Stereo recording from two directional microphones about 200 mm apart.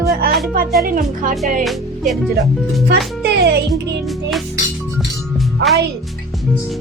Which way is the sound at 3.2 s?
55° right (ahead or behind).